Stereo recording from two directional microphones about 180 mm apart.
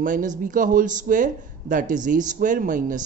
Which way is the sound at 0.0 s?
45° right (ahead or behind).